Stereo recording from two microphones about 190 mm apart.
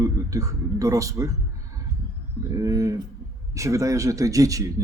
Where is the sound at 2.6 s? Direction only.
15° right (ahead or behind).